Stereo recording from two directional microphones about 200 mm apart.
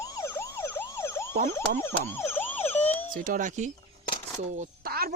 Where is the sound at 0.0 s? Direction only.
15° left (ahead or behind).